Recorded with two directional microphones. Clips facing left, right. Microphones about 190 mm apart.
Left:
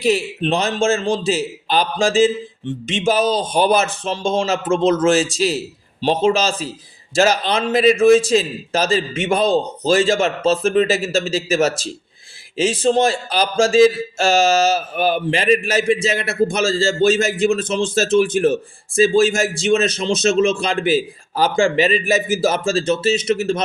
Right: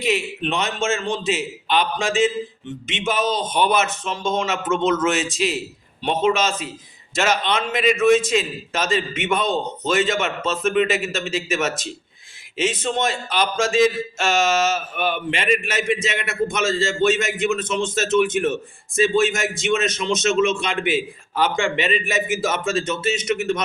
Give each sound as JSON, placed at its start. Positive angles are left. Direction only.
{"t": 0.0, "sound": "speech", "side_deg": 35}